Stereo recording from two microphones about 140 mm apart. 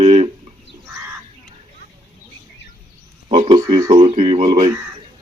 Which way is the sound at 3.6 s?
25° right (ahead or behind).